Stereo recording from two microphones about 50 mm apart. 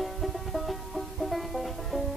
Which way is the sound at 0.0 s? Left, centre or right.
Centre.